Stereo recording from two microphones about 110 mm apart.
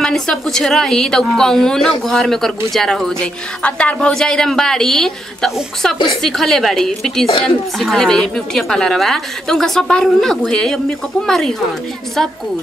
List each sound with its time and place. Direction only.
0.0 s a woman's voice: 5° left (ahead or behind)